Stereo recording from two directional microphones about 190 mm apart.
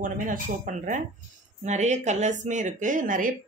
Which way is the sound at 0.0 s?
45° right (ahead or behind).